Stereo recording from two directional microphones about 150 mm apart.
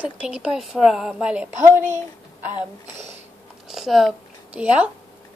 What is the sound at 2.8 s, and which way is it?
Speech, 50° right (ahead or behind).